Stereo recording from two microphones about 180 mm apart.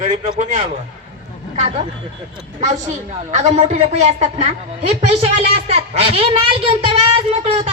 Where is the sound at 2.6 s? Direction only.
40° right (ahead or behind).